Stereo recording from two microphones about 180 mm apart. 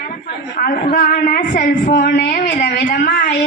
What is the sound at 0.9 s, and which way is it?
Speech, 55° left (ahead or behind).